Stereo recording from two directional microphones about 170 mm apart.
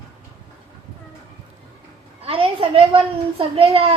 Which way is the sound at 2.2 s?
35° right (ahead or behind).